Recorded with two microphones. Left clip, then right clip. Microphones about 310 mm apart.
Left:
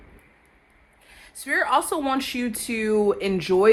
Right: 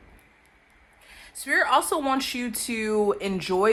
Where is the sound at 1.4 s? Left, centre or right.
Right.